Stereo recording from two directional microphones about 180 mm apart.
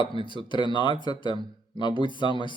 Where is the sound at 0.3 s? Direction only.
25° left (ahead or behind).